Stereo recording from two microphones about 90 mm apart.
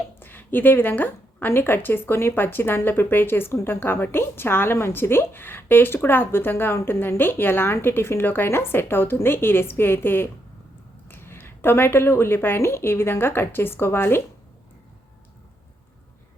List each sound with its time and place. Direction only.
0.2 s a woman's voice: 20° left (ahead or behind)